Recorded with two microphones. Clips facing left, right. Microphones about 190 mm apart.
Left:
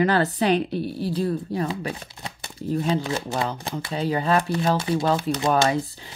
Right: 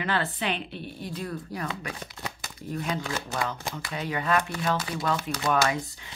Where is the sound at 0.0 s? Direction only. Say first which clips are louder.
Left 9 dB; 40° left (ahead or behind).